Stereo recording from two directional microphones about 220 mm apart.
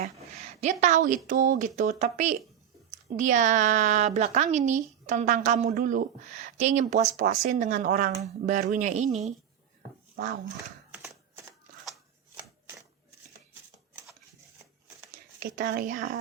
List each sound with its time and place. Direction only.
0.2 s a woman's voice: 30° right (ahead or behind)
10.9 s typewriter: 10° right (ahead or behind)
15.4 s a woman's voice: 40° right (ahead or behind)